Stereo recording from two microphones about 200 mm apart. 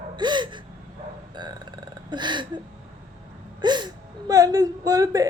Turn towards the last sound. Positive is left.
turn(degrees=-20)  # may be behind; listen again after turning